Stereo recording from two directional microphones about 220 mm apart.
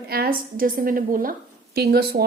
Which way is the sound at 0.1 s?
40° right (ahead or behind).